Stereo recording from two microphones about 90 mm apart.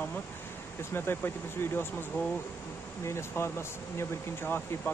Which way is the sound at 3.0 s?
30° left (ahead or behind).